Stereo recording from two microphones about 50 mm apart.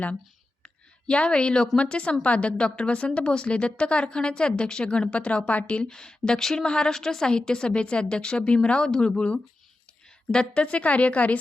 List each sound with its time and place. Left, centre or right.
0.6 s a woman's voice: left